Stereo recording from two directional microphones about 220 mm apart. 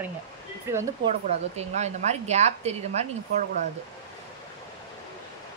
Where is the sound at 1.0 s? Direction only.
30° right (ahead or behind).